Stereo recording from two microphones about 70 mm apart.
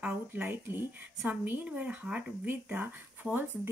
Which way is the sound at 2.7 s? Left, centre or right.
Right.